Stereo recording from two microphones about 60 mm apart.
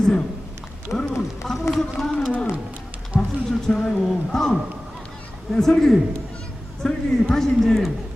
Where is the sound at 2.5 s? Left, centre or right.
Right.